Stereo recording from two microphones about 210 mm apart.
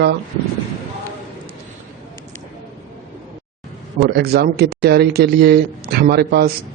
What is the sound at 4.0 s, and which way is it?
Speech, 50° right (ahead or behind).